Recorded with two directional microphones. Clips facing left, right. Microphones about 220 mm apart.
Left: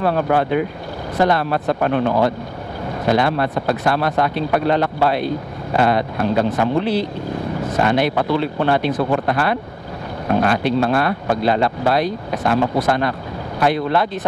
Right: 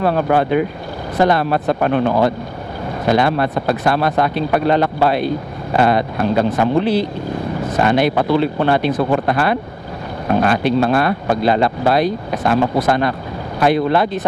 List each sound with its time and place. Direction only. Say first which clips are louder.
0.0 s speech: right 2 dB; 15° right (ahead or behind)
8.9 s speech: right 2 dB; 25° right (ahead or behind)
9.2 s speech: right 2 dB; 15° right (ahead or behind)